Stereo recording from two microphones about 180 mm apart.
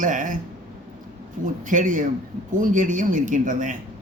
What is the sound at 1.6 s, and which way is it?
A man's voice, 45° right (ahead or behind).